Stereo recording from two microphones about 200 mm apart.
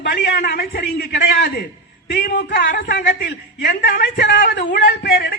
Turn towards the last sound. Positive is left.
turn(degrees=60)  # may be behind; listen again after turning